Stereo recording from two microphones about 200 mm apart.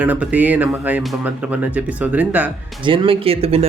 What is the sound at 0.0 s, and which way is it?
Speech, 5° right (ahead or behind).